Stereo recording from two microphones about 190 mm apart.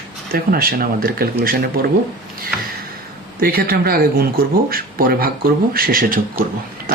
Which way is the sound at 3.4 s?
50° right (ahead or behind).